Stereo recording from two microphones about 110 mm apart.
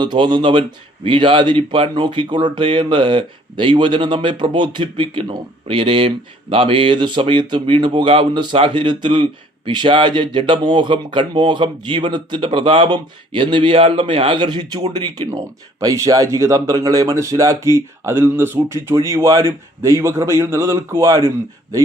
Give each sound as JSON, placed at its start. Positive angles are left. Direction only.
{"t": 0.0, "sound": "speech", "side_deg": -45}